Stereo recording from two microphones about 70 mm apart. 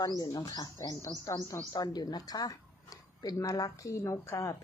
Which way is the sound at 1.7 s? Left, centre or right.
Left.